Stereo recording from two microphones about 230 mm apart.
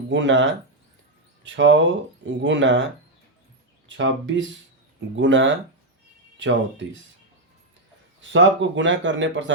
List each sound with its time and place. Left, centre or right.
0.1 s speech: right
3.8 s speech: right
8.2 s speech: right